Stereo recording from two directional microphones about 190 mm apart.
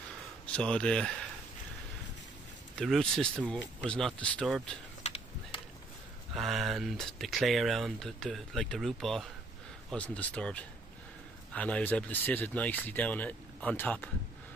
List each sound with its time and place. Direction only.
0.5 s speech: 5° left (ahead or behind)
2.7 s speech: centre (ahead or behind)
5.0 s a sound: 35° left (ahead or behind)
6.3 s speech: centre (ahead or behind)